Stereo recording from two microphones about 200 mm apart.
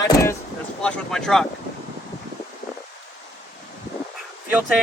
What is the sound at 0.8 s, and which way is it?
Speech, 5° left (ahead or behind).